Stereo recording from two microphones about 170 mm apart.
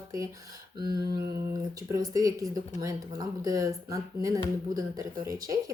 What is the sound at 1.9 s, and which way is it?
Speech, 20° right (ahead or behind).